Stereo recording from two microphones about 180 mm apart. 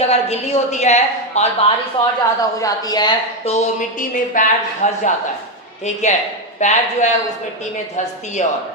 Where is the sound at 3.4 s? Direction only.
40° left (ahead or behind).